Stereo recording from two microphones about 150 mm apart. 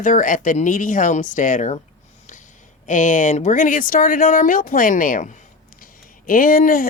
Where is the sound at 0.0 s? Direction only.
60° left (ahead or behind).